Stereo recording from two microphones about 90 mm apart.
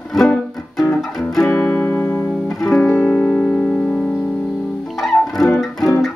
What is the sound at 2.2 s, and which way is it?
Music, 5° right (ahead or behind).